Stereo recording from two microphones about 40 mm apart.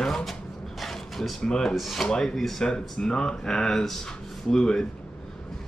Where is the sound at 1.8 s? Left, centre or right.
Centre.